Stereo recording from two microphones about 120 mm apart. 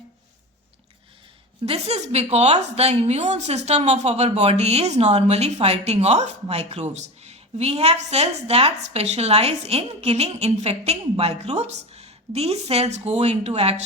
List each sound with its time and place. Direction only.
1.6 s a woman's voice: 55° right (ahead or behind)